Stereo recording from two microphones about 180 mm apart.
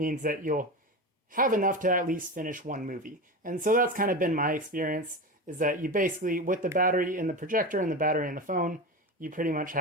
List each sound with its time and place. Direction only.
0.0 s speech: 50° right (ahead or behind)